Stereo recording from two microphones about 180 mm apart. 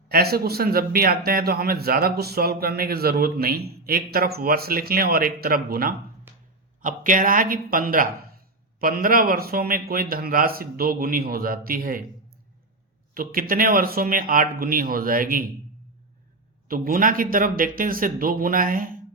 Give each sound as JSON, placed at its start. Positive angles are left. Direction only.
{"t": 0.1, "sound": "a man's voice", "side_deg": -60}
{"t": 13.1, "sound": "a man's voice", "side_deg": -50}
{"t": 16.6, "sound": "a man's voice", "side_deg": -50}